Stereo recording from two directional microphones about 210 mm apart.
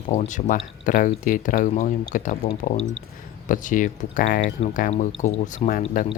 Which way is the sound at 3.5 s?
40° left (ahead or behind).